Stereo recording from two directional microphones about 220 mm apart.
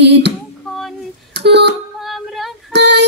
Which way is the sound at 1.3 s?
50° right (ahead or behind).